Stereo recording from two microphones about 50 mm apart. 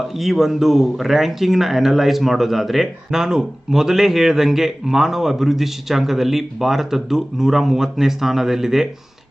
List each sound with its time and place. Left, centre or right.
0.2 s speech: centre